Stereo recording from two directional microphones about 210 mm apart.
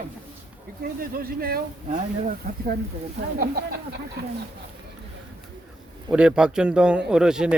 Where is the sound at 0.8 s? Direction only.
45° right (ahead or behind).